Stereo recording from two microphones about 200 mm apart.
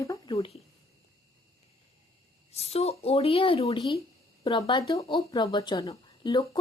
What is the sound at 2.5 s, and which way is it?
Speech, 30° left (ahead or behind).